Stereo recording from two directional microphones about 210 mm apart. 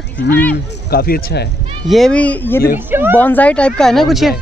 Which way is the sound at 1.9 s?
Centre (ahead or behind).